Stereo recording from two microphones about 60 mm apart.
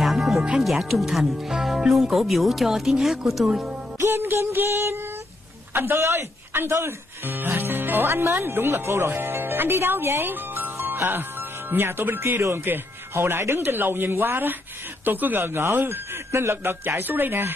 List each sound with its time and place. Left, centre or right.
0.0 s music: centre
0.6 s speech: centre
3.4 s speech: centre
4.0 s music: right
5.7 s speech: right